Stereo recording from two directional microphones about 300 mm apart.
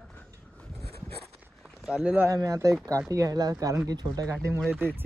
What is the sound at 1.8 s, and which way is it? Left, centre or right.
Speech, centre.